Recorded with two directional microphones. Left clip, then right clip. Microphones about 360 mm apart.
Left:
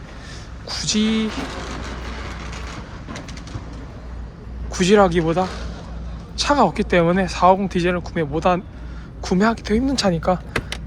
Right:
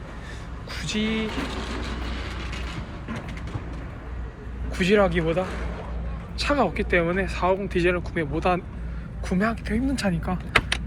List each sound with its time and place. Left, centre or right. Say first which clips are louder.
0.7 s speech: left 6 dB; centre
2.4 s vehicle: left 1 dB; centre
4.7 s speech: left 5 dB; centre